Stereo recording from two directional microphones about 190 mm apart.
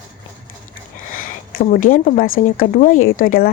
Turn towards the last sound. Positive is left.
turn(degrees=45)  # may be behind; listen again after turning